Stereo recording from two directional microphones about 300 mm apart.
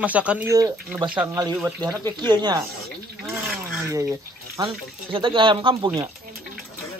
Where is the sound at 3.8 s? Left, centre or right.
Centre.